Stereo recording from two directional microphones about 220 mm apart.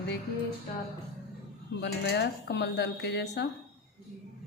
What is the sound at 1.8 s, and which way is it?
A woman's voice, 50° left (ahead or behind).